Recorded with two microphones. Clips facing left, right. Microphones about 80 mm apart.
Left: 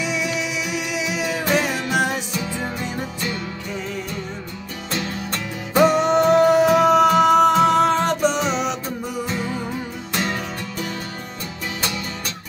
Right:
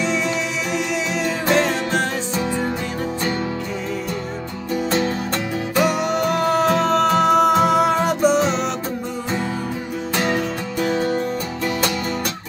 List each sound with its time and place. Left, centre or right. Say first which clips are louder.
0.0 s music: right 3 dB; centre
5.8 s music: left 4 dB; left; by 8.7 s centre
10.1 s music: right 4 dB; centre
10.9 s music: right 11 dB; right